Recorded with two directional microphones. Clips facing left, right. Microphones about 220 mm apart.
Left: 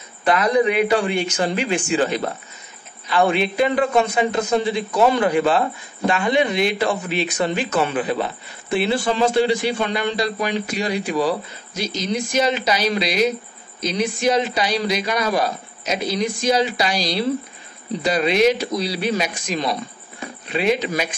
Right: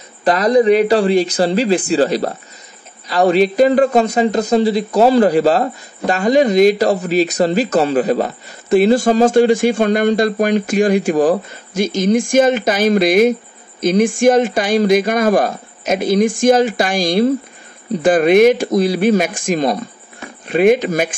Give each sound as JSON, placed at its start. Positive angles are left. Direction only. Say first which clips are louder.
{"t": 0.2, "sound": "a man's voice", "louder": "right 5 dB", "side_deg": -35}